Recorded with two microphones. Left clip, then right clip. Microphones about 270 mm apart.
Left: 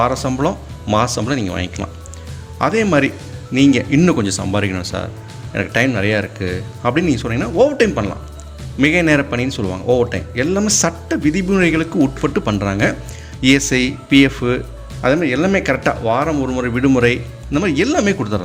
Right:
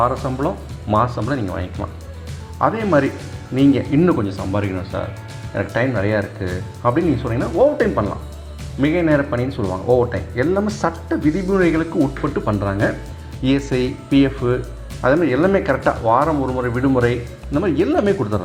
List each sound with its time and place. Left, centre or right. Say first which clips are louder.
0.0 s speech: left 2 dB; left
6.1 s speech: left 2 dB; left